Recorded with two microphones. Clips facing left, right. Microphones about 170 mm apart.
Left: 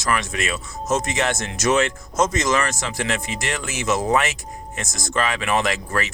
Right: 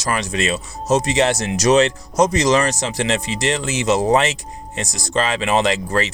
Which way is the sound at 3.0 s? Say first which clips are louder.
Right 5 dB; 20° right (ahead or behind).